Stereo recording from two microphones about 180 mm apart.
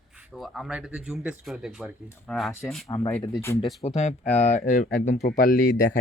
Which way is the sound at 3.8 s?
35° left (ahead or behind).